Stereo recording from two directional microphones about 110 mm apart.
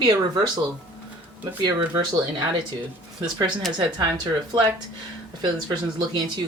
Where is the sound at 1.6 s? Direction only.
40° right (ahead or behind).